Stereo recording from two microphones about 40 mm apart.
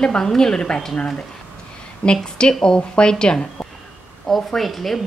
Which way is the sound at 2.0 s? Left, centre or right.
Left.